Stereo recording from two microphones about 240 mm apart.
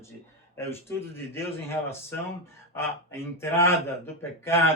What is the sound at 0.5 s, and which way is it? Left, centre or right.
Speech, centre.